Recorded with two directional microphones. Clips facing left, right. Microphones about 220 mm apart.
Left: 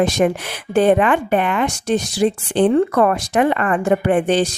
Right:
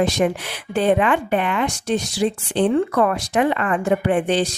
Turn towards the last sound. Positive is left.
turn(degrees=50)  # may be behind; listen again after turning